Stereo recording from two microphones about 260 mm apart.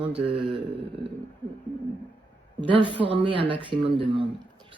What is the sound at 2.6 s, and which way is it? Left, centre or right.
A woman's voice, centre.